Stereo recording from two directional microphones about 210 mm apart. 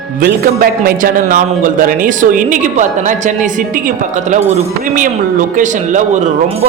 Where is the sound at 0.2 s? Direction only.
45° right (ahead or behind).